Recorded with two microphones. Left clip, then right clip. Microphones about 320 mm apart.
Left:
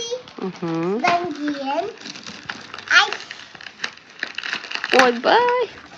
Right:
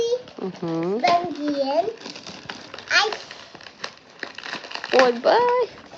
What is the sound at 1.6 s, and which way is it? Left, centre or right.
Speech, left.